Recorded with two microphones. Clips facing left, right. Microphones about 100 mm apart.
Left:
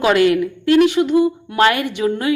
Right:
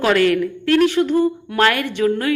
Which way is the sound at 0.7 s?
45° right (ahead or behind).